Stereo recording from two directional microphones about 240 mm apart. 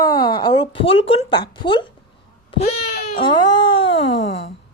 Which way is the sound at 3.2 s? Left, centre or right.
Centre.